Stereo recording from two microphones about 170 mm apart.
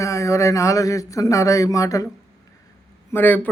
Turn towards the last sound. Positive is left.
turn(degrees=10)  # may be behind; listen again after turning